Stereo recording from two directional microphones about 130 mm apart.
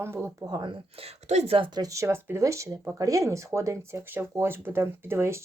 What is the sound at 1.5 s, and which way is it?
Speech, 35° right (ahead or behind).